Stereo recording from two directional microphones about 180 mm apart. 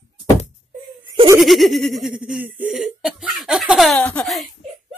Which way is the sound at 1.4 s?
Centre (ahead or behind).